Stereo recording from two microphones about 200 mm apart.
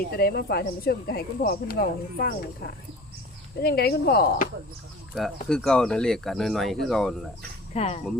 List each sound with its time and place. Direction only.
0.2 s speech: 50° left (ahead or behind)
3.6 s speech: 50° left (ahead or behind)
5.5 s speech: 5° left (ahead or behind)
7.7 s speech: 30° left (ahead or behind)